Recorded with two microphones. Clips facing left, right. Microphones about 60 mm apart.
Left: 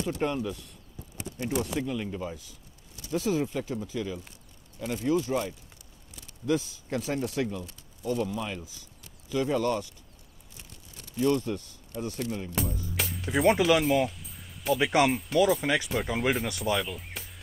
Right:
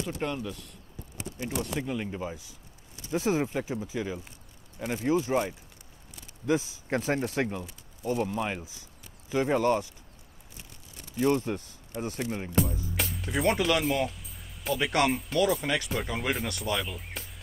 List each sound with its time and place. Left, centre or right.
0.2 s speech: centre
1.8 s speech: centre
3.1 s speech: right
3.6 s speech: centre
6.9 s speech: right
8.0 s speech: right
8.3 s speech: right
11.2 s speech: right
12.6 s speech: centre